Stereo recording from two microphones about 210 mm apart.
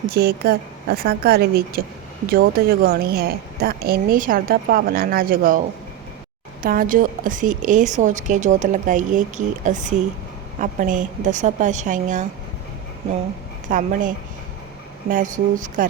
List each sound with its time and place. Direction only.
0.1 s a woman's voice: 50° right (ahead or behind)
6.6 s a woman's voice: 40° right (ahead or behind)
13.7 s a woman's voice: 40° right (ahead or behind)
15.1 s a woman's voice: 40° right (ahead or behind)